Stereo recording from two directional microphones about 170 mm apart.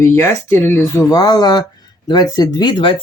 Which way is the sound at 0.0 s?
15° left (ahead or behind).